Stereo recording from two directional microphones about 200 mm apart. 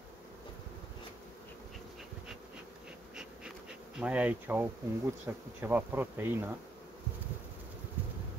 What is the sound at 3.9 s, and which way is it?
Bee, 5° right (ahead or behind).